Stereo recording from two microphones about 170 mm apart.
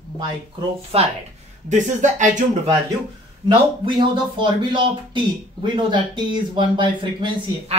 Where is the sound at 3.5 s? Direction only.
30° right (ahead or behind).